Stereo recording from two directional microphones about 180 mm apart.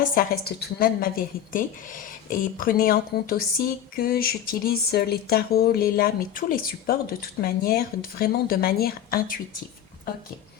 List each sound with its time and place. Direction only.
0.2 s a woman's voice: 55° left (ahead or behind)